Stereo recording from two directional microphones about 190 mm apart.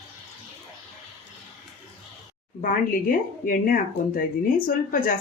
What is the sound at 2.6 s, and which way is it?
Speech, 45° left (ahead or behind).